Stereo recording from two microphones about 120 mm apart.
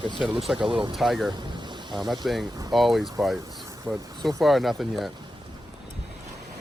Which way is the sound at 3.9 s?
25° right (ahead or behind).